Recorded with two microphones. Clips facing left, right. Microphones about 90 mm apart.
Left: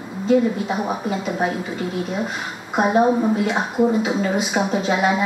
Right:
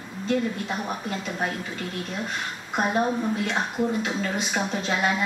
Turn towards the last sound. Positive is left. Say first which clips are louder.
# left 6 dB
turn(degrees=5)  # may be behind; listen again after turning